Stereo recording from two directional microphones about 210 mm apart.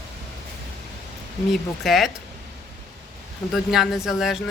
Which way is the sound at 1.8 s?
Centre (ahead or behind).